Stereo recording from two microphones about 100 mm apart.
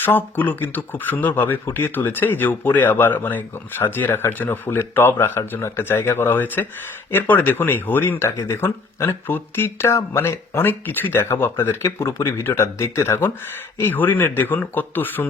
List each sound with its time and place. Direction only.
0.0 s speech: 20° left (ahead or behind)